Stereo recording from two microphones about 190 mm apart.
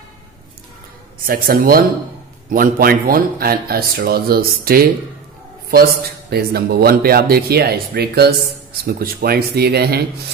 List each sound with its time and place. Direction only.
1.2 s speech: 50° right (ahead or behind)
6.3 s speech: 55° right (ahead or behind)